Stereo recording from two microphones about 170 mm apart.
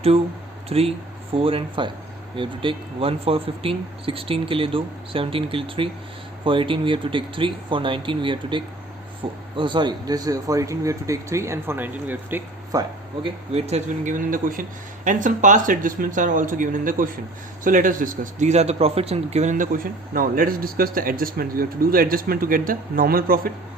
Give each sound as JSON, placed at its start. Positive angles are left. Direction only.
{"t": 0.7, "sound": "speech", "side_deg": -35}
{"t": 13.2, "sound": "speech", "side_deg": -40}